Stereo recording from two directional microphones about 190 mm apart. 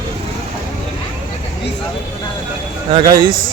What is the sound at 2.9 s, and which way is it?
Speech, 25° right (ahead or behind).